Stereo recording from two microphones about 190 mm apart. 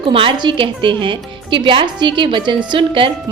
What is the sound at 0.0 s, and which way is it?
A woman's voice, 30° right (ahead or behind).